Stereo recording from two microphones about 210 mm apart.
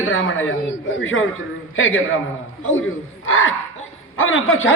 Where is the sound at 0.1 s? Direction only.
70° left (ahead or behind).